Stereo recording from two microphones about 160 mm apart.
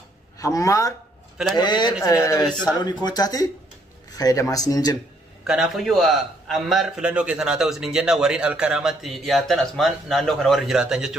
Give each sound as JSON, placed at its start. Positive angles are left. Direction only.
{"t": 0.4, "sound": "speech", "side_deg": 20}
{"t": 5.5, "sound": "a man's voice", "side_deg": 0}